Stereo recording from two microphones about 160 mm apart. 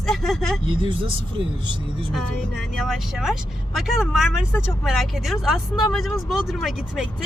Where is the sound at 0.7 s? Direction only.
30° right (ahead or behind).